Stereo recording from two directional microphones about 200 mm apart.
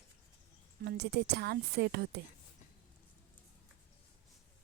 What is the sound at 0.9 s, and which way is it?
Speech, 55° right (ahead or behind).